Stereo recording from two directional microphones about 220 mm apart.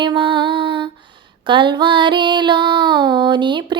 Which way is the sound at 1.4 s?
20° right (ahead or behind).